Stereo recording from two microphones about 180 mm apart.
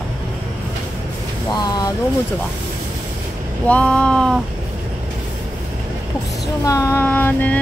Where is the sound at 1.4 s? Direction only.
20° left (ahead or behind).